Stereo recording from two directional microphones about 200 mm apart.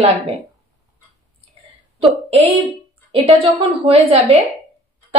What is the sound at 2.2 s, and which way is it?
A woman's voice, 30° right (ahead or behind).